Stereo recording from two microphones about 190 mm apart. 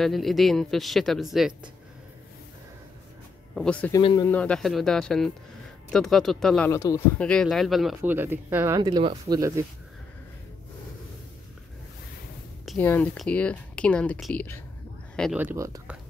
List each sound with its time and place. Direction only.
0.0 s speech: centre (ahead or behind)
3.5 s speech: 5° left (ahead or behind)
3.9 s a man's voice: 20° left (ahead or behind)
4.3 s speech: 5° left (ahead or behind)
6.7 s a man's voice: 20° left (ahead or behind)
7.2 s speech: 5° left (ahead or behind); by 9.4 s 25° right (ahead or behind)
12.7 s speech: 10° left (ahead or behind)
15.3 s speech: 15° right (ahead or behind)